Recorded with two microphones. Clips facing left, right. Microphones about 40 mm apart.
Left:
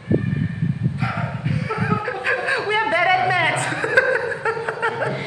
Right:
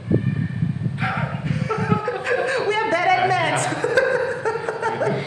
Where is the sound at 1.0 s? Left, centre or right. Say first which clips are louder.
Right 3 dB; right.